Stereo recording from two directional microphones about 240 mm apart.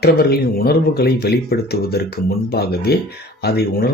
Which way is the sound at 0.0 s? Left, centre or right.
Left.